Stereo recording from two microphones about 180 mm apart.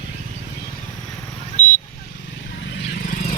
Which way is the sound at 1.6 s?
40° left (ahead or behind).